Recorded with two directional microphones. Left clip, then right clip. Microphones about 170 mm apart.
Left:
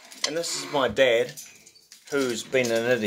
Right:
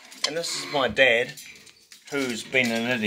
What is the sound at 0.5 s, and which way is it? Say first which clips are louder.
Speech: right 1 dB; 10° right (ahead or behind).